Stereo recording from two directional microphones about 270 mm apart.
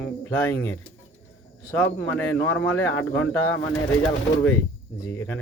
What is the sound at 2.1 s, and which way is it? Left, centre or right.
Speech, centre.